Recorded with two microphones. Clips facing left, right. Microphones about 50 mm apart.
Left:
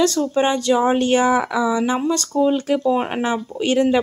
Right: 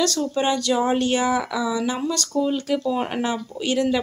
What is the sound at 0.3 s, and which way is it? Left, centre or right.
Speech, left.